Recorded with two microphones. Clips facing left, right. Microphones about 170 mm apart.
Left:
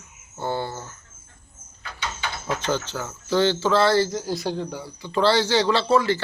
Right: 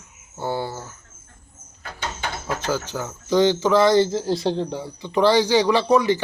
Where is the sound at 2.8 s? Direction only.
15° right (ahead or behind).